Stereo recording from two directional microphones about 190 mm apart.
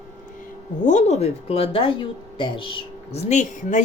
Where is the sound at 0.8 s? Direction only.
40° left (ahead or behind).